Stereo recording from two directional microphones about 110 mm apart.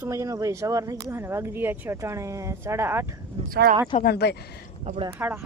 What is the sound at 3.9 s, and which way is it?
Speech, 65° left (ahead or behind).